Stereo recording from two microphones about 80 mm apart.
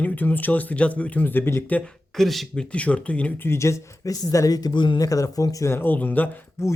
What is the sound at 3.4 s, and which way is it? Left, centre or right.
Speech, left.